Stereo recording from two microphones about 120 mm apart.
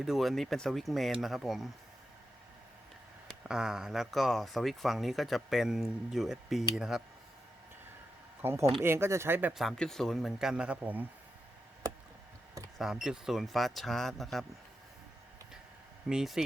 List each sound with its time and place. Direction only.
0.0 s speech: centre (ahead or behind)
3.4 s speech: 5° right (ahead or behind)
8.4 s speech: 20° right (ahead or behind)
9.5 s speech: centre (ahead or behind)
12.8 s speech: 5° right (ahead or behind)
16.0 s speech: 5° right (ahead or behind)